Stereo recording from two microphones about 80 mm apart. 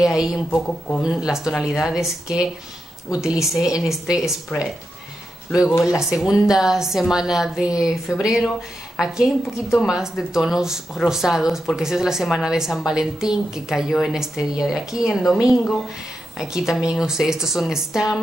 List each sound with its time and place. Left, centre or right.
0.0 s a woman's voice: centre
0.5 s speech: centre
1.0 s a woman's voice: centre
5.5 s a woman's voice: centre